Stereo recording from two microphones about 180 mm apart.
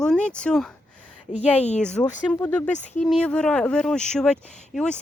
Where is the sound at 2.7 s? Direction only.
40° left (ahead or behind).